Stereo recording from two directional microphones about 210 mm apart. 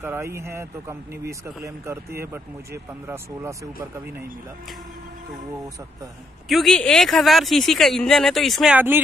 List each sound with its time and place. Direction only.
0.0 s speech: 10° right (ahead or behind)
6.5 s speech: centre (ahead or behind)